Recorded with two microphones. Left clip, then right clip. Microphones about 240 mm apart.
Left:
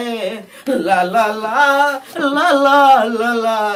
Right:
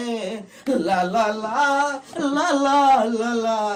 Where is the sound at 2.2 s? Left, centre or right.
Centre.